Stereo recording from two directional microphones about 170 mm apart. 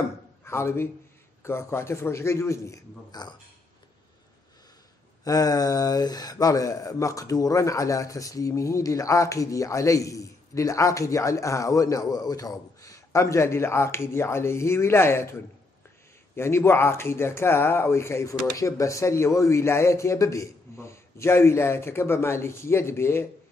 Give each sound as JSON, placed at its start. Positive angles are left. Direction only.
{"t": 0.5, "sound": "speech", "side_deg": 15}
{"t": 5.2, "sound": "speech", "side_deg": 20}
{"t": 16.3, "sound": "speech", "side_deg": 15}